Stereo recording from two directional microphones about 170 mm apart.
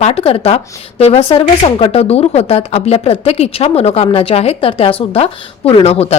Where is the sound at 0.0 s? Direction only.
35° left (ahead or behind).